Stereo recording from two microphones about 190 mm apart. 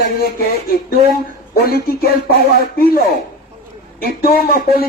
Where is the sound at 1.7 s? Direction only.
55° left (ahead or behind).